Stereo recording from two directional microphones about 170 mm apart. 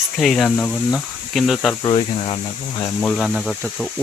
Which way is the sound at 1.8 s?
30° left (ahead or behind).